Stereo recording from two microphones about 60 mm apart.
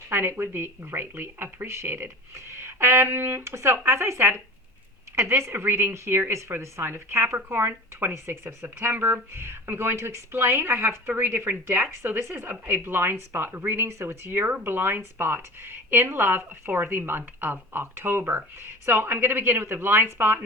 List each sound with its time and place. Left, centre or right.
0.1 s a woman's voice: right